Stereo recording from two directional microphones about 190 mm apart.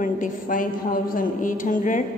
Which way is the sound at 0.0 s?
45° left (ahead or behind).